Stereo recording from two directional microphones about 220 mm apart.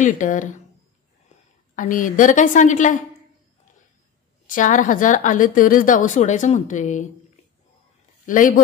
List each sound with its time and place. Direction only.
0.0 s a woman's voice: 35° left (ahead or behind)
1.8 s a woman's voice: 35° left (ahead or behind)
4.5 s a woman's voice: 35° left (ahead or behind)
8.3 s a woman's voice: 35° left (ahead or behind)